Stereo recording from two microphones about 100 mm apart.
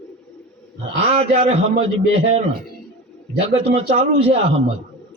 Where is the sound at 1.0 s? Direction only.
90° right.